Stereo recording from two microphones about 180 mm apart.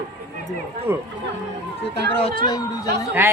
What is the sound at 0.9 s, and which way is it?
Speech, 10° right (ahead or behind).